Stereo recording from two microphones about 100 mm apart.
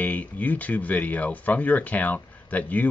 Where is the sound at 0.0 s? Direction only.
15° left (ahead or behind).